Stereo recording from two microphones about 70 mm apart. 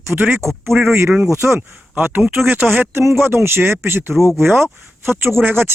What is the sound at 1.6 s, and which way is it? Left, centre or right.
Speech, right.